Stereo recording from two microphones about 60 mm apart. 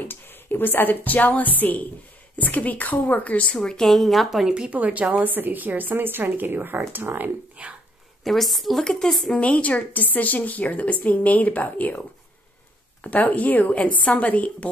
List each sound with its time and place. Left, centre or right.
0.1 s a woman's voice: left; by 4.5 s centre
4.5 s speech: centre
4.7 s a woman's voice: right
7.6 s a woman's voice: centre
8.2 s a woman's voice: centre
9.4 s a woman's voice: left
13.0 s a woman's voice: left